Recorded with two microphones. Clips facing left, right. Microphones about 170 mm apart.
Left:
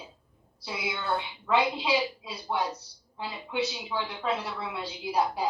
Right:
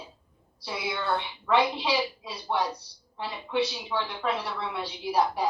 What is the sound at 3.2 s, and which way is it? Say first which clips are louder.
A woman's voice: right 3 dB; 25° left (ahead or behind).